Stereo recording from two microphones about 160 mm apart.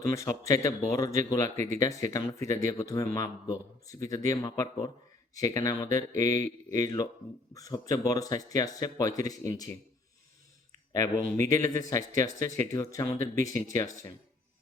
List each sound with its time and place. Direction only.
0.1 s speech: 20° left (ahead or behind)
10.9 s speech: 20° left (ahead or behind)